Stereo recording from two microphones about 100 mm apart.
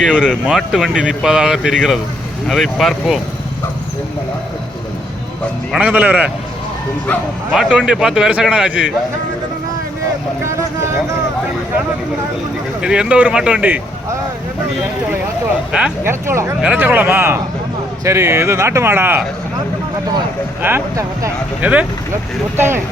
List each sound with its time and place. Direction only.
0.0 s a man's voice: 5° right (ahead or behind)
5.7 s a man's voice: 15° right (ahead or behind)
7.5 s a man's voice: 5° right (ahead or behind)
10.4 s speech: 30° right (ahead or behind)
12.8 s a man's voice: 10° right (ahead or behind)
16.0 s speech: 25° right (ahead or behind)
16.6 s a man's voice: 15° right (ahead or behind)
20.6 s speech: 20° right (ahead or behind)
20.9 s speech: 35° right (ahead or behind)
21.6 s a man's voice: 15° right (ahead or behind)